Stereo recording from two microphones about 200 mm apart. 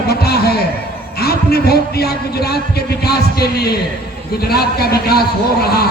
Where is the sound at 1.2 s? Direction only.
50° left (ahead or behind).